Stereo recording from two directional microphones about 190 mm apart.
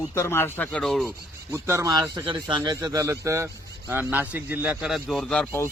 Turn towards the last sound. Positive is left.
turn(degrees=10)  # may be behind; listen again after turning